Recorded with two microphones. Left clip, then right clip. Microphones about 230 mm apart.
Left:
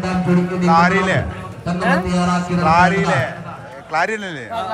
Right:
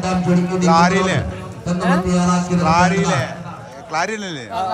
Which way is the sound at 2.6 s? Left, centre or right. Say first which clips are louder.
Left 2 dB; centre.